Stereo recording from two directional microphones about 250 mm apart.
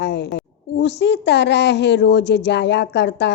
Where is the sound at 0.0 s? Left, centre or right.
Left.